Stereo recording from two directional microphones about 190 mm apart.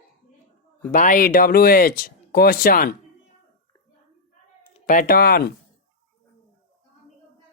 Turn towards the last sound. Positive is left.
turn(degrees=55)  # may be behind; listen again after turning